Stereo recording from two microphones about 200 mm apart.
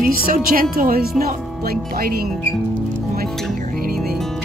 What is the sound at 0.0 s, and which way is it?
Speech, 45° right (ahead or behind).